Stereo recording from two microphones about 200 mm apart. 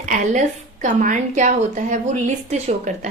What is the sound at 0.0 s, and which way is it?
A woman's voice, 40° right (ahead or behind).